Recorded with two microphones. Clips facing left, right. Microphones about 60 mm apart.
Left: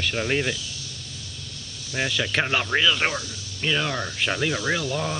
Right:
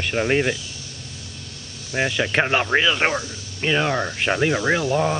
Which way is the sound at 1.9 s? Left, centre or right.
Right.